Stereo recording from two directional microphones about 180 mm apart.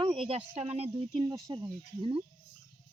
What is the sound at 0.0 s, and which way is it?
Speech, 30° right (ahead or behind).